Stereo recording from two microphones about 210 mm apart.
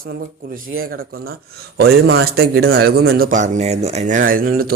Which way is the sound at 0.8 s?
45° right (ahead or behind).